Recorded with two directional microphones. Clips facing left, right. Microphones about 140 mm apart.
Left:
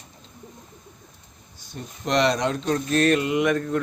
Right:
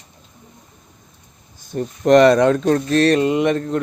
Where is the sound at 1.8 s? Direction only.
50° right (ahead or behind).